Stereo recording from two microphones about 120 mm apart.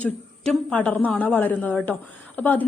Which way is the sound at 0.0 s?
10° left (ahead or behind).